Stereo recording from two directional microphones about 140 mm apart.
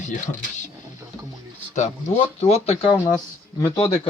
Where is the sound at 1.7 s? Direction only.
55° left (ahead or behind).